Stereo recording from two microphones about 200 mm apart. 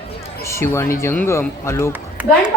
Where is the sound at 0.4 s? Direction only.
15° left (ahead or behind).